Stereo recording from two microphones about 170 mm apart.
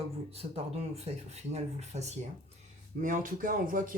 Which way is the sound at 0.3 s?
35° right (ahead or behind).